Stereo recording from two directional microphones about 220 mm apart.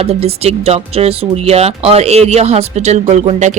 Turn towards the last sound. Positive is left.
turn(degrees=-30)  # may be behind; listen again after turning